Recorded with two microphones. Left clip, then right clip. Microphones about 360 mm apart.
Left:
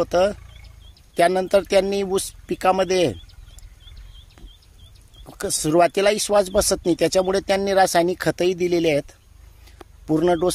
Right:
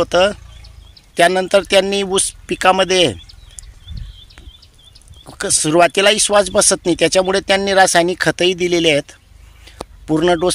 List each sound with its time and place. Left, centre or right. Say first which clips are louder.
0.0 s speech: right 5 dB; left
5.2 s speech: right 6 dB; left
9.7 s a sound: right 12 dB; left
10.0 s speech: right 4 dB; left